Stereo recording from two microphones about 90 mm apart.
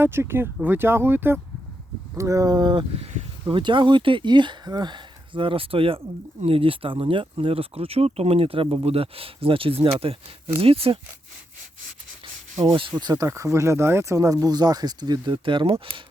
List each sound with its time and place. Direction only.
0.0 s speech: 25° right (ahead or behind)
2.1 s speech: 35° right (ahead or behind); by 2.8 s 50° right (ahead or behind)
3.5 s speech: 65° right (ahead or behind); by 11.0 s 90° right
13.0 s speech: 50° right (ahead or behind)
13.2 s speech: 35° right (ahead or behind); by 16.0 s 80° right